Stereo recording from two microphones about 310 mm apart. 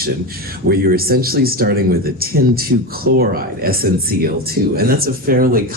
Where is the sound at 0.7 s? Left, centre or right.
Right.